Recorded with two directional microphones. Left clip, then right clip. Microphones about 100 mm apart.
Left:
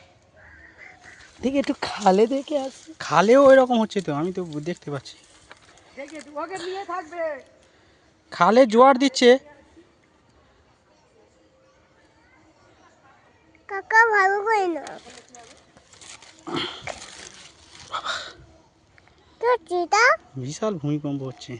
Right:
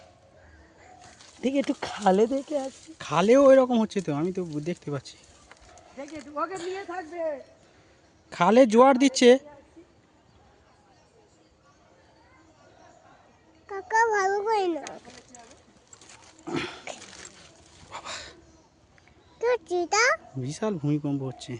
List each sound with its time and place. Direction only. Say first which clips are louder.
1.4 s speech: left 3 dB; 40° left (ahead or behind); by 2.4 s 60° left (ahead or behind)
3.0 s speech: left 4 dB; 5° left (ahead or behind); by 7.0 s 20° right (ahead or behind)
8.3 s a child's voice: left 3 dB; 20° right (ahead or behind)
13.7 s a child's voice: left 6 dB; 25° left (ahead or behind); by 14.8 s 5° left (ahead or behind)
16.4 s dog: left 4 dB; 20° right (ahead or behind)
17.9 s hiccup: left 9 dB; centre (ahead or behind)
19.4 s a child's voice: left 4 dB; 25° right (ahead or behind)
20.8 s a child's voice: left 1 dB; 30° right (ahead or behind)